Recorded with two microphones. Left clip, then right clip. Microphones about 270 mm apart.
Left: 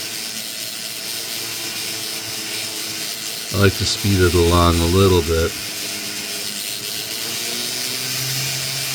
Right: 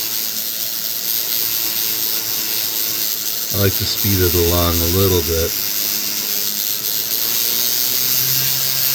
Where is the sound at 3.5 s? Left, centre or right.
Centre.